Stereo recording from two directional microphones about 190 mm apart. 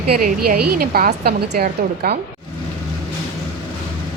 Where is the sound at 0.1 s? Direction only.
55° right (ahead or behind).